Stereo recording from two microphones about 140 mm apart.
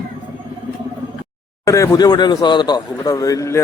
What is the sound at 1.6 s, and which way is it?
A man's voice, 25° left (ahead or behind).